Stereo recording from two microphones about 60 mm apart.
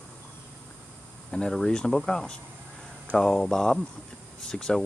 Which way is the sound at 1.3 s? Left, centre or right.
Centre.